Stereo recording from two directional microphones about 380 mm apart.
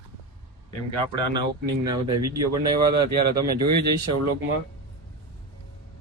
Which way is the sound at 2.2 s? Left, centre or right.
Right.